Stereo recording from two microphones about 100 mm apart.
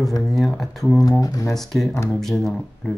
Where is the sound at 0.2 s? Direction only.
Centre (ahead or behind).